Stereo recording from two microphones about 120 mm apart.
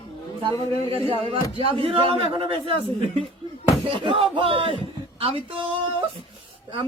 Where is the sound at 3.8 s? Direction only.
50° right (ahead or behind).